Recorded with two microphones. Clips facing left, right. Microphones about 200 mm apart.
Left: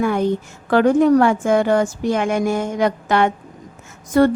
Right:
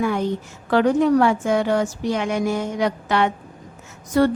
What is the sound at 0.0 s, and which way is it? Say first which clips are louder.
A woman's voice: left 3 dB; 50° left (ahead or behind).